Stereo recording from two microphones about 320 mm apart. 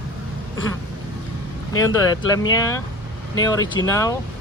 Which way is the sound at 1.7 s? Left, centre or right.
Centre.